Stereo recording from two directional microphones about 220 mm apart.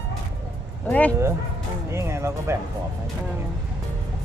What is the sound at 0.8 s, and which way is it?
Speech, 5° left (ahead or behind).